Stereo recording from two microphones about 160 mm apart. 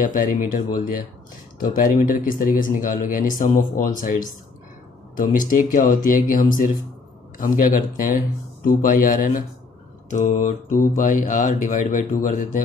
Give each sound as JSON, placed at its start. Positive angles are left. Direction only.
{"t": 0.0, "sound": "speech", "side_deg": 55}